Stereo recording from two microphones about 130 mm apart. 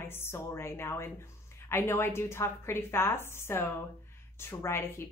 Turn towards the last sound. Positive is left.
turn(degrees=20)  # may be behind; listen again after turning